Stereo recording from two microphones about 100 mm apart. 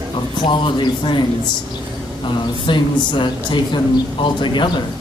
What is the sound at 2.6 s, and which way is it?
Speech, 55° left (ahead or behind).